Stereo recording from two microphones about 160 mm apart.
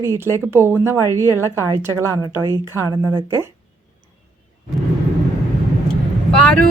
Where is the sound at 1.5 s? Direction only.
15° right (ahead or behind).